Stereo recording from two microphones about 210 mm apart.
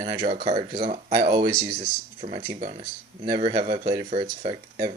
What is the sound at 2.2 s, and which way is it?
A man's voice, 35° right (ahead or behind).